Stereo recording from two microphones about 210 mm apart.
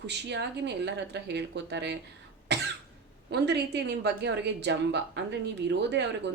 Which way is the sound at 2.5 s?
55° right (ahead or behind).